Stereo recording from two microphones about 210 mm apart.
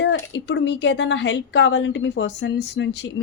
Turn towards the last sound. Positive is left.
turn(degrees=55)  # may be behind; listen again after turning